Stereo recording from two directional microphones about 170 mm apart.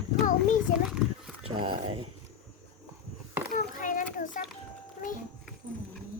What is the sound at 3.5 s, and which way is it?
Children playing, 50° left (ahead or behind).